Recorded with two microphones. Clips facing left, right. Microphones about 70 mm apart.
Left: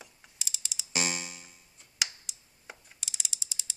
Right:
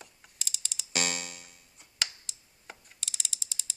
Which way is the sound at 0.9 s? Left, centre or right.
Right.